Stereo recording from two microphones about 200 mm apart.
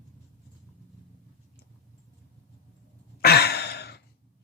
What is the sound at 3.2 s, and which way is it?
Sigh, 50° left (ahead or behind).